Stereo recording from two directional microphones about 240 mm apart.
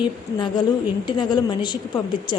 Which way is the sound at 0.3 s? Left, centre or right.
Centre.